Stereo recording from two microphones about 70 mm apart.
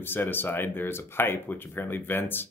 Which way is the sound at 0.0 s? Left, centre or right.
Left.